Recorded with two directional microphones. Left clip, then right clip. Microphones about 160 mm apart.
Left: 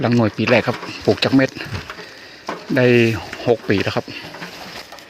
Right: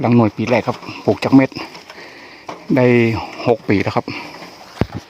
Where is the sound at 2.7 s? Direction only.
20° right (ahead or behind).